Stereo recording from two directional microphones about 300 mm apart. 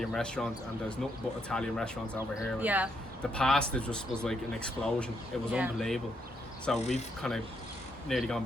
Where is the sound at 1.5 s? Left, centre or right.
Centre.